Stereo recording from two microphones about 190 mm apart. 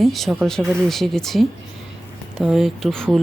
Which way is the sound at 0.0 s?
Centre (ahead or behind).